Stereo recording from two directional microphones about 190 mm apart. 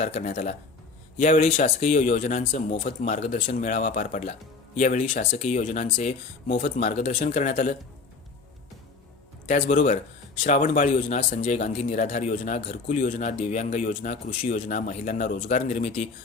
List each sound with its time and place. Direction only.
0.0 s speech: 45° left (ahead or behind)
1.5 s speech: 30° left (ahead or behind)
9.5 s speech: 45° left (ahead or behind)